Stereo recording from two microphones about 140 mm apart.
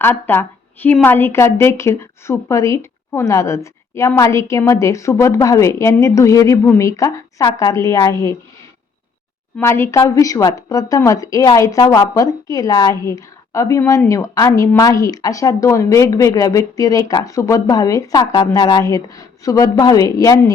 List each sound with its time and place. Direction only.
0.0 s a woman's voice: 15° left (ahead or behind)
9.6 s a woman's voice: 20° left (ahead or behind)